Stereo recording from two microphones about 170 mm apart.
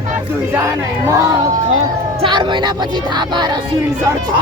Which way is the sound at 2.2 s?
30° right (ahead or behind).